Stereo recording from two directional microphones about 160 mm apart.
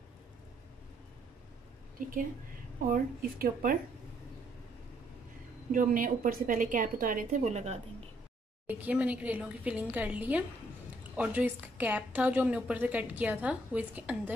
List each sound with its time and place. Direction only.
2.0 s a woman's voice: 60° right (ahead or behind)
5.7 s a woman's voice: 55° right (ahead or behind)
8.6 s a woman's voice: 10° right (ahead or behind)